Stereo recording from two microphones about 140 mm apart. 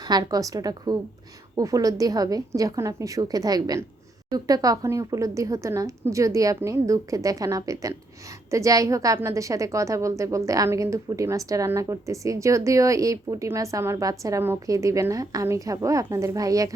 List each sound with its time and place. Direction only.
0.1 s a woman's voice: 30° right (ahead or behind)